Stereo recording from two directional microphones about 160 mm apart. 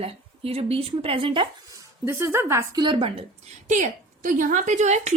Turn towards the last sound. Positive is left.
turn(degrees=-45)  # may be behind; listen again after turning